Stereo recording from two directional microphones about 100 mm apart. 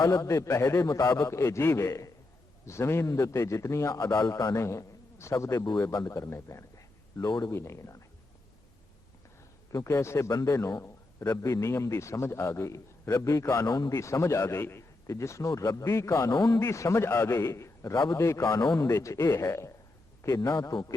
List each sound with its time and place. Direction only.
0.0 s a man's voice: 30° left (ahead or behind)
9.7 s a man's voice: 30° left (ahead or behind)
13.7 s a man's voice: 45° left (ahead or behind)
17.9 s a man's voice: 50° left (ahead or behind)
18.2 s a man's voice: 30° left (ahead or behind)